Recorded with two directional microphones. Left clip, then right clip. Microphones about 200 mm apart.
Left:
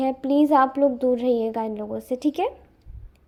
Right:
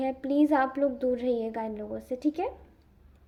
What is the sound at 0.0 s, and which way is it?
A woman's voice, 25° left (ahead or behind).